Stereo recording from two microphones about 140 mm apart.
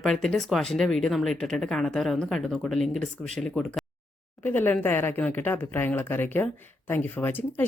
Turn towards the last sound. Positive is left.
turn(degrees=15)  # may be behind; listen again after turning